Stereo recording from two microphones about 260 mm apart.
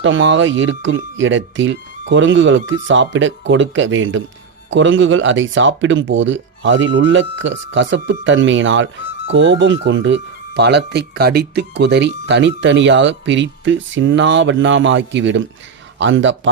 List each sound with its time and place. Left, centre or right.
0.0 s speech: right